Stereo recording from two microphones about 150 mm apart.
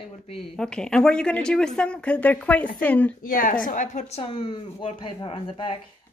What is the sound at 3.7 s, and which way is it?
Speech, 55° left (ahead or behind).